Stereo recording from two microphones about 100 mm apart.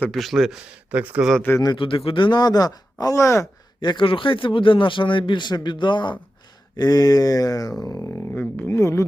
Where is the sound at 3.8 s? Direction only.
55° left (ahead or behind).